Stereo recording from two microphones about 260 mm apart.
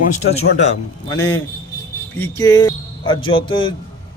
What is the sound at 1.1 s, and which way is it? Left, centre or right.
A man's voice, centre.